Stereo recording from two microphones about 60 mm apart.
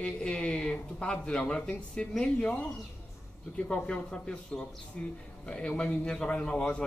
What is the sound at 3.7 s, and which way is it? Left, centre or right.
A man's voice, centre.